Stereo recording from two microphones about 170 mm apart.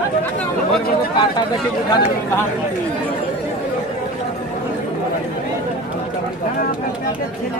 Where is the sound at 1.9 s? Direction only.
20° left (ahead or behind).